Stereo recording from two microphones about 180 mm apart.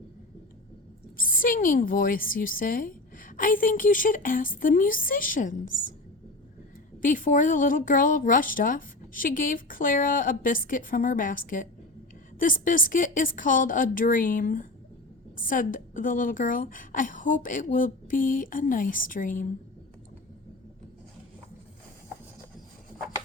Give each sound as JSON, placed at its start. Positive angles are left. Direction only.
{"t": 1.1, "sound": "a woman's voice", "side_deg": 50}
{"t": 7.0, "sound": "a woman's voice", "side_deg": 45}